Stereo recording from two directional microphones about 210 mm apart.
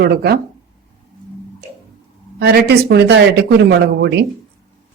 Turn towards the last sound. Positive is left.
turn(degrees=-55)  # may be behind; listen again after turning